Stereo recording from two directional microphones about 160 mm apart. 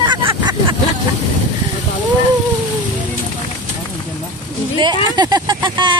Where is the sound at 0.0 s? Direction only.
30° right (ahead or behind).